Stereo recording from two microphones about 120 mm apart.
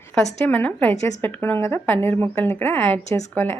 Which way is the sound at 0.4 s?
15° left (ahead or behind).